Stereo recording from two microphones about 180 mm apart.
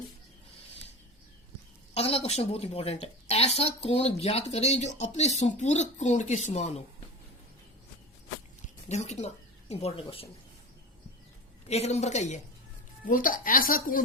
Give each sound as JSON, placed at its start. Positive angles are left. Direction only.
{"t": 1.9, "sound": "a woman's voice", "side_deg": 35}
{"t": 8.6, "sound": "a woman's voice", "side_deg": 40}
{"t": 11.7, "sound": "a woman's voice", "side_deg": 35}
{"t": 13.1, "sound": "speech", "side_deg": 50}